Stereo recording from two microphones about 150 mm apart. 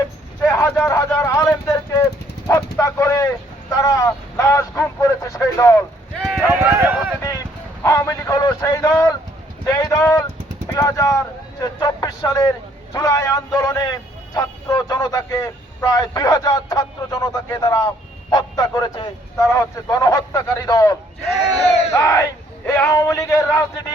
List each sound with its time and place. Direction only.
0.4 s speech: 15° left (ahead or behind)
6.1 s a sound: centre (ahead or behind)
6.5 s speech: 10° right (ahead or behind)
7.9 s a man's voice: 20° left (ahead or behind)
21.6 s speech: 45° left (ahead or behind)
21.9 s a man's voice: 15° left (ahead or behind)